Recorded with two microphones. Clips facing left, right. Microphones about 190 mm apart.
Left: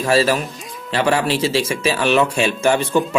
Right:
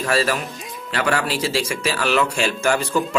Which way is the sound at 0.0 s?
25° left (ahead or behind).